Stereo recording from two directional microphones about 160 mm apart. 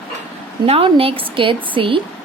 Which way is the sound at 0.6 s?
35° right (ahead or behind).